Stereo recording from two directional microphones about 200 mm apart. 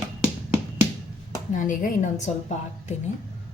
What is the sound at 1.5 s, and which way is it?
Speech, 40° left (ahead or behind).